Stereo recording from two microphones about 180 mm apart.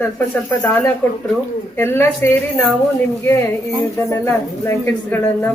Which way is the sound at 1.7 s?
15° left (ahead or behind).